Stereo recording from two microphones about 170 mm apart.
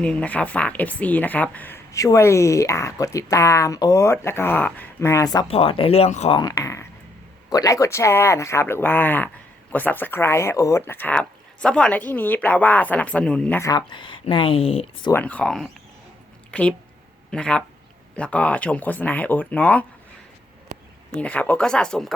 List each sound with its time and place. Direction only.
0.0 s speech: 5° left (ahead or behind); by 5.5 s 20° left (ahead or behind)
5.5 s speech: 35° left (ahead or behind)
6.3 s speech: 20° left (ahead or behind); by 13.6 s 5° left (ahead or behind)
13.6 s speech: 25° left (ahead or behind)
15.1 s speech: 10° left (ahead or behind)
20.7 s a sound: 40° right (ahead or behind)
21.2 s speech: 10° left (ahead or behind)